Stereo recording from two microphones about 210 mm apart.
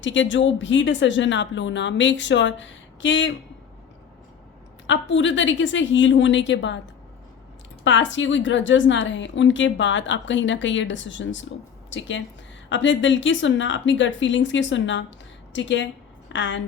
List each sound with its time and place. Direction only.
0.0 s a woman's voice: 60° left (ahead or behind)
4.9 s a woman's voice: 60° left (ahead or behind)
7.9 s a woman's voice: 60° left (ahead or behind)